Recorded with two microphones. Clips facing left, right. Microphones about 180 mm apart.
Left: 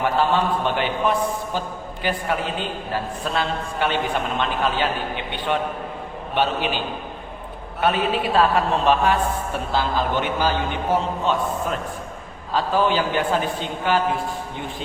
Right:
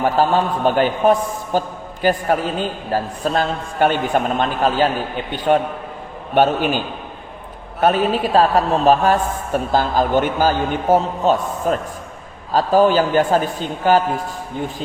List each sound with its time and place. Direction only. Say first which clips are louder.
0.0 s a man's voice: right 4 dB; 40° right (ahead or behind)
7.8 s a man's voice: right 5 dB; 40° right (ahead or behind)